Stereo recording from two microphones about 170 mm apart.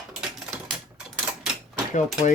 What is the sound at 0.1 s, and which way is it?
Typewriter, centre (ahead or behind).